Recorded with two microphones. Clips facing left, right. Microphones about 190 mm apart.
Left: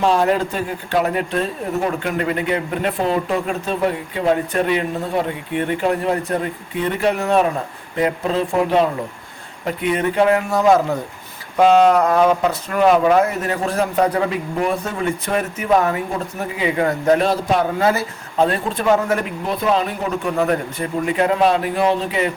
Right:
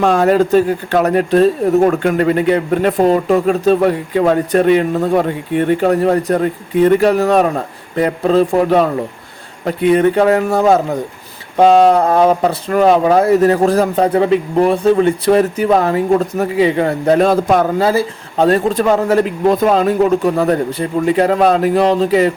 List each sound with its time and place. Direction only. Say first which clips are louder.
0.0 s speech: right 5 dB; 50° right (ahead or behind)
11.5 s speech: right 3 dB; 35° right (ahead or behind)
17.2 s speech: right 6 dB; 50° right (ahead or behind)
17.7 s speech: right 4 dB; 30° right (ahead or behind)